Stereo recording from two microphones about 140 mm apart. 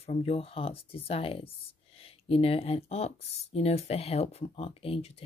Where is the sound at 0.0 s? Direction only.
45° left (ahead or behind).